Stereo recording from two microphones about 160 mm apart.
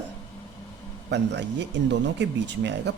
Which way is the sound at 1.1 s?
90° right.